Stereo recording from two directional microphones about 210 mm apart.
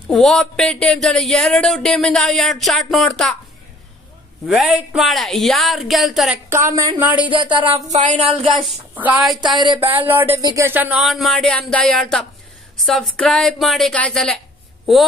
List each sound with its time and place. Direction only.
0.1 s speech: 5° left (ahead or behind)
4.5 s speech: centre (ahead or behind)
7.3 s speech: 25° right (ahead or behind)
8.6 s speech: 5° right (ahead or behind)
9.4 s speech: 20° right (ahead or behind)
9.8 s speech: 10° right (ahead or behind)
10.2 s speech: 25° right (ahead or behind)
10.5 s speech: 10° right (ahead or behind)